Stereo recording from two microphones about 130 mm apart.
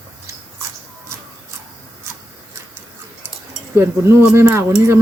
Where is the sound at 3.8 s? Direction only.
20° right (ahead or behind).